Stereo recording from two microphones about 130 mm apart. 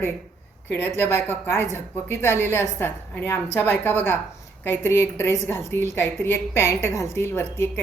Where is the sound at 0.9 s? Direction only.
15° left (ahead or behind).